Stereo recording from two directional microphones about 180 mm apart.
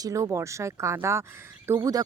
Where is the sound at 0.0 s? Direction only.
15° right (ahead or behind).